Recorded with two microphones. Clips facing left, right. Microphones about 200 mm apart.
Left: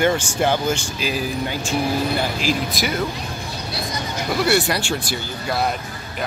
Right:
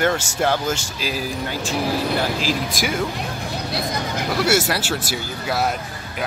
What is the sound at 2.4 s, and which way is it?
Speech, 45° right (ahead or behind).